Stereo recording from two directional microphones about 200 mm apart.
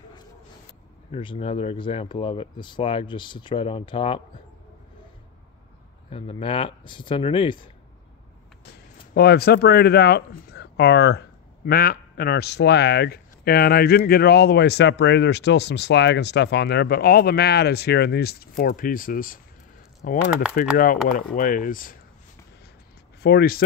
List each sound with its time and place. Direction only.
1.1 s speech: 25° left (ahead or behind)
6.0 s speech: 25° left (ahead or behind)
9.1 s speech: 50° left (ahead or behind)
23.2 s speech: 50° left (ahead or behind)